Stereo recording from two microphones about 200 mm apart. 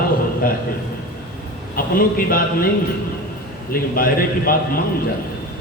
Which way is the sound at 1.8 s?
45° left (ahead or behind).